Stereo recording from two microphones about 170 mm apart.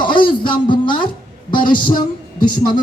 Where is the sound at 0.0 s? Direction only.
30° left (ahead or behind).